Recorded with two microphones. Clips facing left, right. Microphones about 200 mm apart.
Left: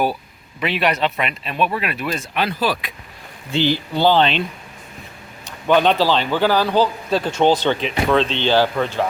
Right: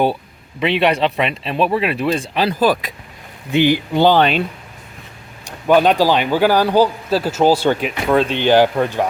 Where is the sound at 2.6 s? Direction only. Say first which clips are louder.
Right 6 dB; 50° right (ahead or behind).